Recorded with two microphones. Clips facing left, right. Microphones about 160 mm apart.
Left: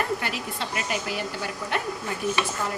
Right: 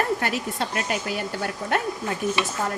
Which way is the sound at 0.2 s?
50° right (ahead or behind).